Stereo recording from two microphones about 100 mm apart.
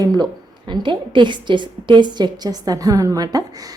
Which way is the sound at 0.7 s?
55° right (ahead or behind).